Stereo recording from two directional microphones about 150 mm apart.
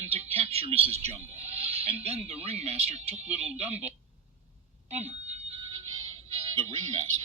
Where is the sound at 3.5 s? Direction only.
45° right (ahead or behind).